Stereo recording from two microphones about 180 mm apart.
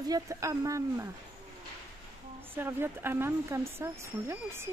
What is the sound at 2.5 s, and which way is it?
Speech, 10° right (ahead or behind).